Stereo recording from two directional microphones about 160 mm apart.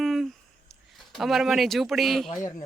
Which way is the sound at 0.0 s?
Centre (ahead or behind).